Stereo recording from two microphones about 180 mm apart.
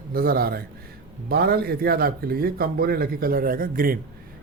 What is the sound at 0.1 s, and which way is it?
A man's voice, 55° right (ahead or behind).